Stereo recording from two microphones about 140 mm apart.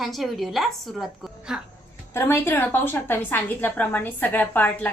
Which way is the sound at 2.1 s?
15° left (ahead or behind).